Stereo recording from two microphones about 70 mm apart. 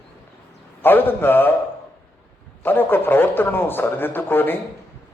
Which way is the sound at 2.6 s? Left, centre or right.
Left.